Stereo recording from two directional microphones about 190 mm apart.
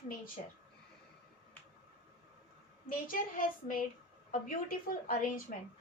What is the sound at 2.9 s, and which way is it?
A woman's voice, 45° left (ahead or behind).